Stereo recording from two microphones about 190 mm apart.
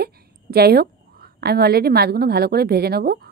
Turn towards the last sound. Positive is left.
turn(degrees=-55)  # may be behind; listen again after turning